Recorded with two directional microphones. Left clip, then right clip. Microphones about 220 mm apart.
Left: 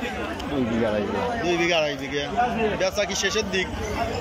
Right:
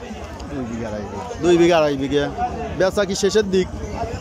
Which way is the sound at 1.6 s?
15° right (ahead or behind).